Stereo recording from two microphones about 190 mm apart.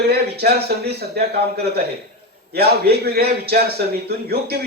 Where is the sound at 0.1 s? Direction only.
55° right (ahead or behind).